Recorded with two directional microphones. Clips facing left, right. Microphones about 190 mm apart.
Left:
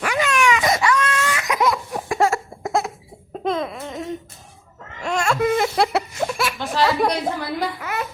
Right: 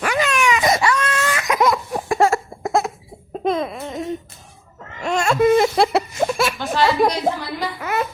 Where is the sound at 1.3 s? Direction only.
45° right (ahead or behind).